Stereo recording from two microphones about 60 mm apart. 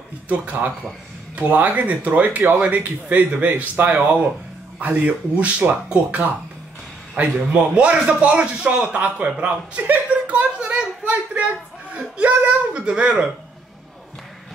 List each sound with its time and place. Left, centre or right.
0.3 s speech: right
7.2 s speech: right
9.2 s a sound: right